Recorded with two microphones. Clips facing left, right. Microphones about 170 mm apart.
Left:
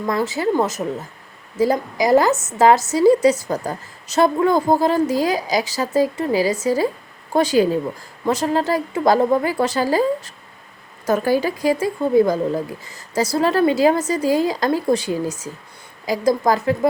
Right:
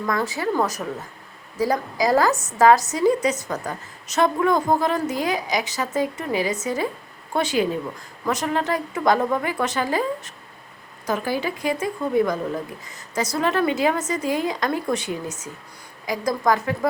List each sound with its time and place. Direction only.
0.0 s a woman's voice: 25° left (ahead or behind)
11.0 s a woman's voice: 45° left (ahead or behind); by 16.7 s 30° left (ahead or behind)